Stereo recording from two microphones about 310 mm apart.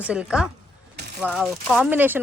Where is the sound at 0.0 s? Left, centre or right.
Centre.